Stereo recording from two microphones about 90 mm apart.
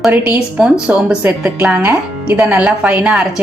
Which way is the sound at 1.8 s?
20° right (ahead or behind).